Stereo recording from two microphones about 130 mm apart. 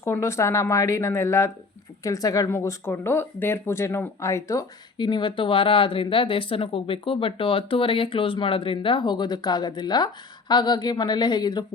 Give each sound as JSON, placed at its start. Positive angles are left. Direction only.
{"t": 0.0, "sound": "speech", "side_deg": 20}
{"t": 4.9, "sound": "a woman's voice", "side_deg": 35}